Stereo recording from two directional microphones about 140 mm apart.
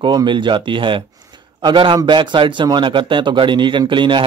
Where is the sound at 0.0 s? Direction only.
30° right (ahead or behind).